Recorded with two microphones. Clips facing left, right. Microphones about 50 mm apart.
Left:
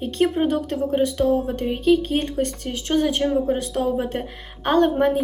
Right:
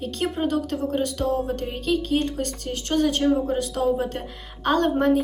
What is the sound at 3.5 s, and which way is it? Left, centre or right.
A woman's voice, left.